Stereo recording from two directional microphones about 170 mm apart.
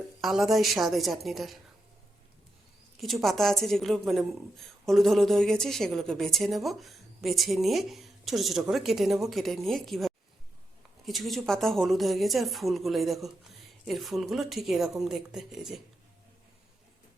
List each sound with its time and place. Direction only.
0.2 s a woman's voice: centre (ahead or behind)
3.0 s a woman's voice: centre (ahead or behind)